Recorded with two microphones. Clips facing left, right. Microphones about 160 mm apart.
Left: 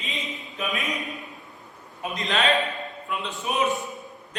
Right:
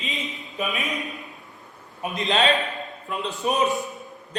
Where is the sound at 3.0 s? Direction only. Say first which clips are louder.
Right 5 dB; 40° right (ahead or behind).